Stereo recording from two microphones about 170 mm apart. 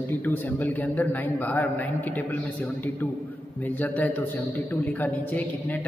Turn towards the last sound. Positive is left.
turn(degrees=10)  # may be behind; listen again after turning